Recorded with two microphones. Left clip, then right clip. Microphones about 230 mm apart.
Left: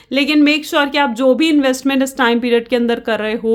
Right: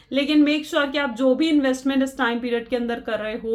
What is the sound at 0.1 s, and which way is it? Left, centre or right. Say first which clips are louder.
Speech: left 6 dB; left.